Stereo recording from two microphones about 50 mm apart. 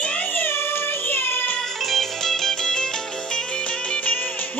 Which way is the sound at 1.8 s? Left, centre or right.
Centre.